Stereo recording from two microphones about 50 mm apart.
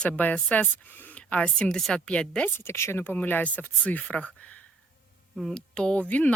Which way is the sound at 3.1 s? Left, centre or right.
Left.